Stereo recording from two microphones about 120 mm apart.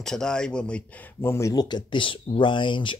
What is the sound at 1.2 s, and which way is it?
Speech, 25° left (ahead or behind).